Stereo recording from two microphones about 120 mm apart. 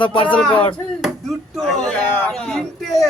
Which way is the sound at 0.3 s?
10° left (ahead or behind).